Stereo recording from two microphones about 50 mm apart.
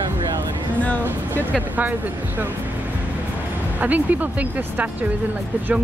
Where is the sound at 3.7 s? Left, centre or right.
Right.